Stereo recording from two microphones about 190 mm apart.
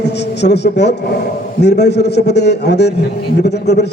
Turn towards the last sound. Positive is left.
turn(degrees=60)  # may be behind; listen again after turning